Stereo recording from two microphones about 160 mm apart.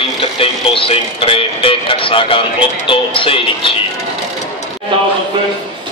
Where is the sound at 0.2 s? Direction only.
35° left (ahead or behind).